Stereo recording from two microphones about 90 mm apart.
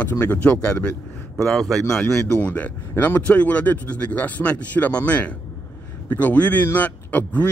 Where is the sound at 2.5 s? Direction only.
15° left (ahead or behind).